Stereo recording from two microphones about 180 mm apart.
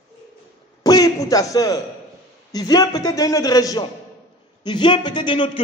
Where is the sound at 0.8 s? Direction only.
20° left (ahead or behind).